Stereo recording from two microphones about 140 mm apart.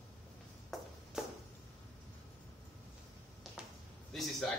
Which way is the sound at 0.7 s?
Centre (ahead or behind).